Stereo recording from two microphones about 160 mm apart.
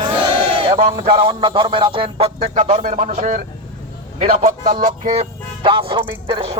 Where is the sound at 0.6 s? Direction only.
35° right (ahead or behind).